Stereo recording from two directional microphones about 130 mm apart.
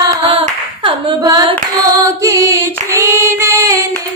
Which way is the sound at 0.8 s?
35° right (ahead or behind).